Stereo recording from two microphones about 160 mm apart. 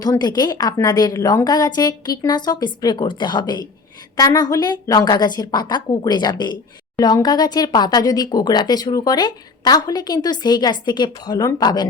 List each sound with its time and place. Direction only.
0.0 s a woman's voice: 25° left (ahead or behind)